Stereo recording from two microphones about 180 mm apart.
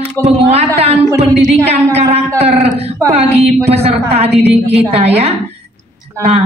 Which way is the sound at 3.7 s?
35° right (ahead or behind).